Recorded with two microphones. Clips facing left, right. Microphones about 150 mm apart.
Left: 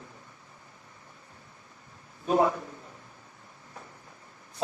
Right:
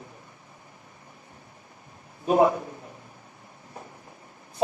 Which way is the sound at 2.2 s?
20° right (ahead or behind).